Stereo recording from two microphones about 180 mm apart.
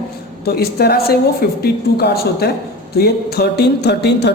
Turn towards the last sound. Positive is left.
turn(degrees=70)  # may be behind; listen again after turning